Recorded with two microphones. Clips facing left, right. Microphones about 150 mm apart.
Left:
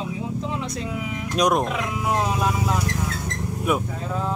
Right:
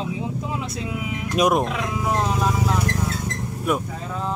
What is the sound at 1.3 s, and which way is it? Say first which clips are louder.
Speech: right 1 dB; 5° right (ahead or behind).